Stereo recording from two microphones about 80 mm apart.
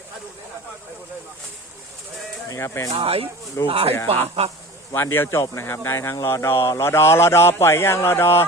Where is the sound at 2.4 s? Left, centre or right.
Left.